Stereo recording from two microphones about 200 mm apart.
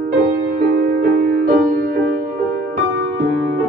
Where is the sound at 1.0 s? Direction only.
45° right (ahead or behind).